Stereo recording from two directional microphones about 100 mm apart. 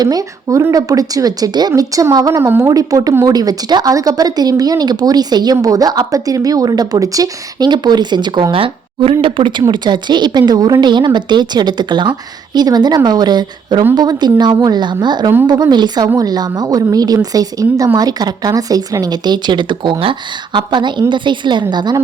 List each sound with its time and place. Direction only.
0.0 s speech: 40° right (ahead or behind)